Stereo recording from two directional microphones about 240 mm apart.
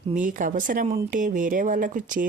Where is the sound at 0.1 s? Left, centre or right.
Right.